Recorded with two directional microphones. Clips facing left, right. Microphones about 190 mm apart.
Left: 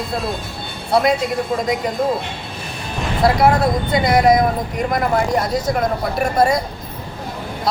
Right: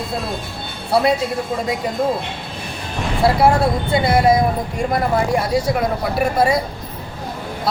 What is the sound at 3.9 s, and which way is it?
Speech, 30° right (ahead or behind).